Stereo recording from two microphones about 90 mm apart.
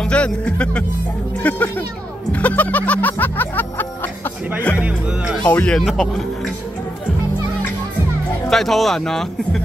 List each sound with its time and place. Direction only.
0.0 s speech: 15° left (ahead or behind)
2.3 s music: 15° left (ahead or behind)
4.7 s music: 15° right (ahead or behind)
5.4 s speech: 15° left (ahead or behind)
8.5 s speech: 5° left (ahead or behind)